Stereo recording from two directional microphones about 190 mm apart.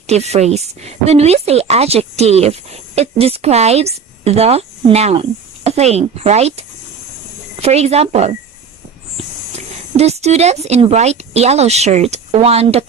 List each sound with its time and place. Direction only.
0.1 s speech: 35° right (ahead or behind)